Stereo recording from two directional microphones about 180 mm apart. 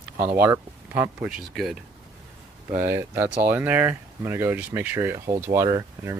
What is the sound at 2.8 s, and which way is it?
Speech, 15° right (ahead or behind).